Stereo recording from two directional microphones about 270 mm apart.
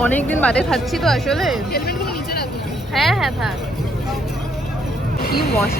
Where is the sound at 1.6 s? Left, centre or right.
Left.